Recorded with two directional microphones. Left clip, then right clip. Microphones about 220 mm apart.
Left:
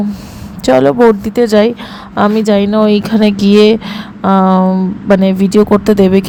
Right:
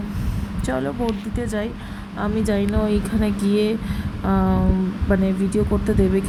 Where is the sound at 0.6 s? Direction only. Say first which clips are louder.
Left 18 dB; 35° left (ahead or behind).